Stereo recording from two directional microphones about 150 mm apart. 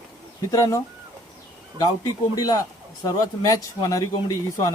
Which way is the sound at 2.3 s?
25° left (ahead or behind).